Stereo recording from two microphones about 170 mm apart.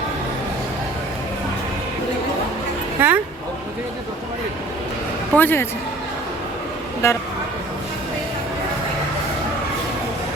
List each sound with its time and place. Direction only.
3.0 s speech: 10° right (ahead or behind)
5.3 s speech: 10° left (ahead or behind)
7.0 s speech: 15° left (ahead or behind)